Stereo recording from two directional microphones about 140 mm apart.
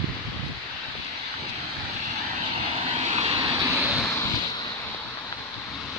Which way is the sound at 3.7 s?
5° right (ahead or behind).